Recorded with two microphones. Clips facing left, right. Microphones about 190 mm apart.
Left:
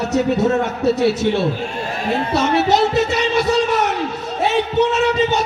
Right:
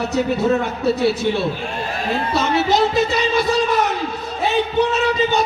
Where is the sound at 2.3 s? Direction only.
75° left (ahead or behind).